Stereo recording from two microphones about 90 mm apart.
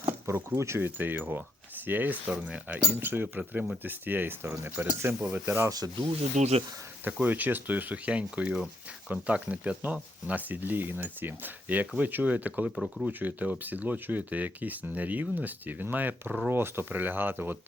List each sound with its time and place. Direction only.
0.1 s speech: 25° right (ahead or behind)
7.0 s speech: 20° right (ahead or behind)
12.7 s speech: centre (ahead or behind)
13.1 s speech: 20° right (ahead or behind)